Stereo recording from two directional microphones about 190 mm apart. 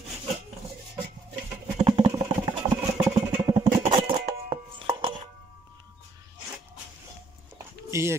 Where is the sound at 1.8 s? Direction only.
30° right (ahead or behind).